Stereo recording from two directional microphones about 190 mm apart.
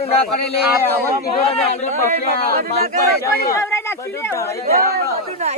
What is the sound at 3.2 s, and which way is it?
Speech, 15° left (ahead or behind).